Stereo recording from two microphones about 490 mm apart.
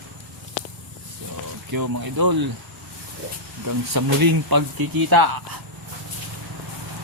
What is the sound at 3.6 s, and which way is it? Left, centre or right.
Speech, right.